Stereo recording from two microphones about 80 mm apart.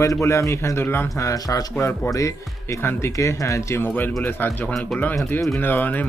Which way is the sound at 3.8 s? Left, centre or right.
Left.